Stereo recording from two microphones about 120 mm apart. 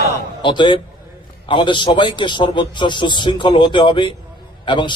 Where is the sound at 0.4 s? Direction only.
40° left (ahead or behind).